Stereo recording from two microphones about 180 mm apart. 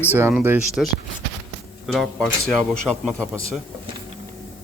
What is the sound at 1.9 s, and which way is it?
Speech, centre (ahead or behind).